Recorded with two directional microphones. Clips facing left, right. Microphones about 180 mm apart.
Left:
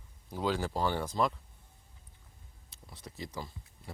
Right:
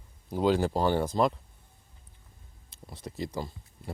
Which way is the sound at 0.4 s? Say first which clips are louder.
Right 6 dB; 25° right (ahead or behind).